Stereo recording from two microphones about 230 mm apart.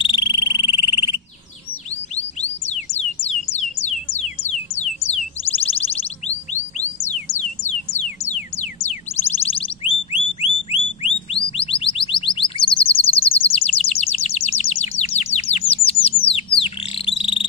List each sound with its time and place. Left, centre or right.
0.0 s frog: centre
2.4 s music: left
7.9 s music: left
10.7 s music: left
17.2 s frog: left